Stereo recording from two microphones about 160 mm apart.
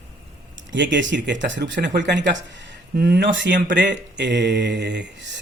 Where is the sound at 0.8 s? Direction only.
90° right.